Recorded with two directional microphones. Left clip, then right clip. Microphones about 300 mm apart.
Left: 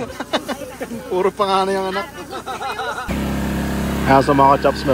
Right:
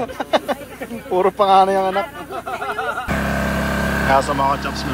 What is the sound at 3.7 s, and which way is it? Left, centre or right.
Vehicle, right.